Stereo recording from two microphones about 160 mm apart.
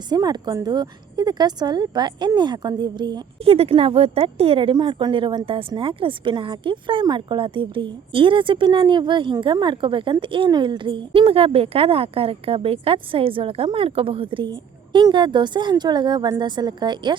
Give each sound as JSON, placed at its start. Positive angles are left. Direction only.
{"t": 0.1, "sound": "a woman's voice", "side_deg": -25}